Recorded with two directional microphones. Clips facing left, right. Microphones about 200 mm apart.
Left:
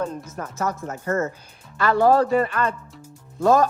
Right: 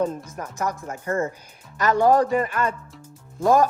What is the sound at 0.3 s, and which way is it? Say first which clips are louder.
Speech: left 1 dB; 15° right (ahead or behind).